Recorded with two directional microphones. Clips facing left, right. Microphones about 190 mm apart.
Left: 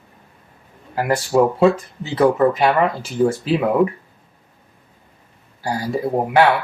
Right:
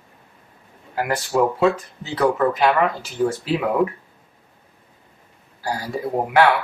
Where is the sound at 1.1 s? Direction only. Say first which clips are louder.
Left 4 dB; 30° left (ahead or behind); by 3.3 s 15° left (ahead or behind).